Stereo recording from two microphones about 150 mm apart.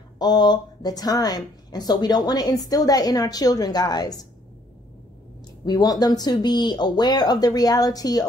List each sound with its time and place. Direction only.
0.2 s a woman's voice: 30° left (ahead or behind)
5.7 s a woman's voice: 25° left (ahead or behind)